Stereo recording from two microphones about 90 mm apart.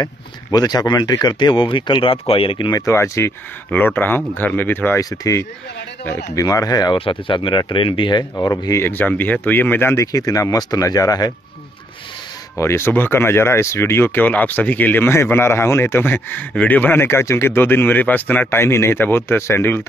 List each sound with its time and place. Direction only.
0.0 s speech: 50° left (ahead or behind); by 2.7 s 85° left
2.7 s speech: 35° left (ahead or behind)
5.1 s speech: 40° left (ahead or behind)
7.0 s speech: 70° left (ahead or behind)
8.7 s speech: 20° left (ahead or behind)
10.1 s speech: 40° left (ahead or behind)
12.5 s speech: 30° left (ahead or behind)